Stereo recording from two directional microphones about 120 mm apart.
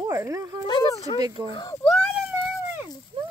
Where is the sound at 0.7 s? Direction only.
35° left (ahead or behind).